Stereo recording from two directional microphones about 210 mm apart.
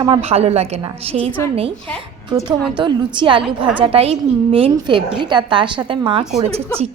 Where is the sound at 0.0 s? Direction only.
25° right (ahead or behind).